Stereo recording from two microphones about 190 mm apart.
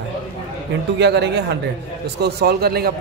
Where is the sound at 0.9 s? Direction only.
65° right (ahead or behind).